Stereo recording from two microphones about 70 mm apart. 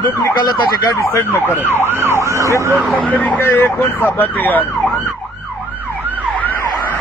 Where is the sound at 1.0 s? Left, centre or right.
Left.